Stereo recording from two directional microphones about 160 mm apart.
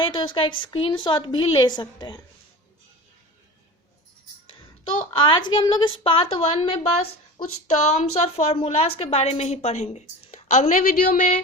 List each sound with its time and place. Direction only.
0.0 s a woman's voice: 30° left (ahead or behind)
5.2 s a woman's voice: 30° left (ahead or behind); by 11.3 s 50° left (ahead or behind)